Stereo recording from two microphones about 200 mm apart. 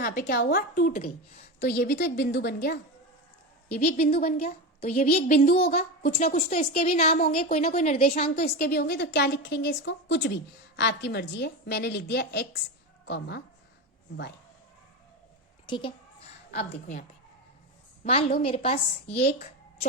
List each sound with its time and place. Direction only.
0.0 s a woman's voice: 50° left (ahead or behind)
3.8 s a woman's voice: 50° left (ahead or behind)
4.4 s a woman's voice: 35° left (ahead or behind); by 13.4 s 55° left (ahead or behind)
15.6 s a child's voice: 25° left (ahead or behind)
16.5 s a woman's voice: 35° left (ahead or behind)